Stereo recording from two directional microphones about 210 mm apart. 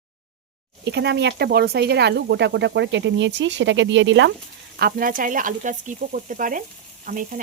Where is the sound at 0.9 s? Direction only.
55° right (ahead or behind).